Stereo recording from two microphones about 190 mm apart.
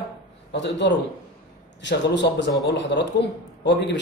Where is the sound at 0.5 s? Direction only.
65° left (ahead or behind).